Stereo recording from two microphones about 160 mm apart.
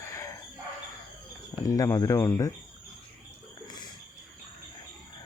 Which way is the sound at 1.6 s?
20° left (ahead or behind).